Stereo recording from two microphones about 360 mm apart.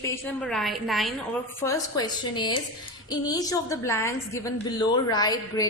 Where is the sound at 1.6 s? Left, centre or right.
Centre.